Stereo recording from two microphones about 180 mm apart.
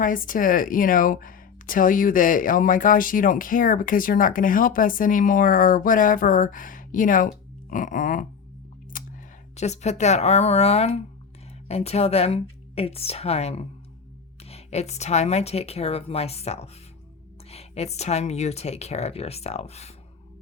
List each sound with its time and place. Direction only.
0.0 s speech: 50° left (ahead or behind)
8.9 s a sound: 50° left (ahead or behind)
9.6 s speech: 40° left (ahead or behind)